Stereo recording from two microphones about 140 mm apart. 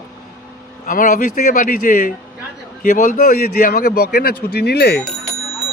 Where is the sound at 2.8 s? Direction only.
90° left.